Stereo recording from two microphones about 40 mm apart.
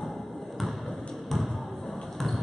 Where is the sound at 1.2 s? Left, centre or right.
Centre.